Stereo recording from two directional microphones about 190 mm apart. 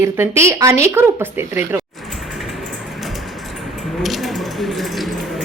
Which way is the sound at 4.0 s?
Centre (ahead or behind).